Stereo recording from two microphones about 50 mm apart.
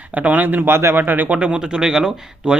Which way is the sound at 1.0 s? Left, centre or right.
Right.